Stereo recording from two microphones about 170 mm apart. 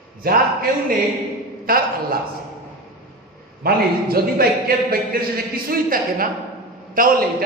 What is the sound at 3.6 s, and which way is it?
A man's voice, 60° right (ahead or behind).